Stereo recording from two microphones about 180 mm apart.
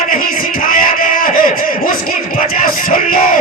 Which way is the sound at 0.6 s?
50° left (ahead or behind).